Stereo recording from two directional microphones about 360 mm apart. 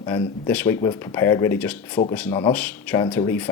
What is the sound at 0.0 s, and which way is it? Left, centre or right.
Speech, centre.